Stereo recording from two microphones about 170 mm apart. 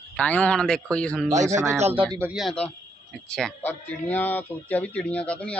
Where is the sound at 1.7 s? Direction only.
40° right (ahead or behind).